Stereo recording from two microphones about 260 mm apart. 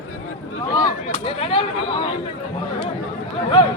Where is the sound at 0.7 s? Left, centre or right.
Centre.